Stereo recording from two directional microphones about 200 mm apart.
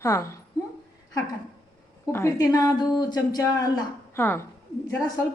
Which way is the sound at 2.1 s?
15° left (ahead or behind).